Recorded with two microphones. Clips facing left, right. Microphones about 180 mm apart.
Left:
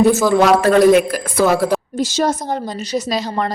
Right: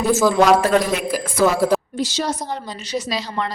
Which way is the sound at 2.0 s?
45° left (ahead or behind).